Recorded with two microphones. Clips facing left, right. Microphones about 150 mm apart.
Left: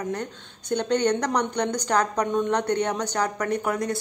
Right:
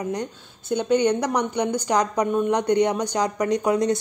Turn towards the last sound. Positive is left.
turn(degrees=-20)  # may be behind; listen again after turning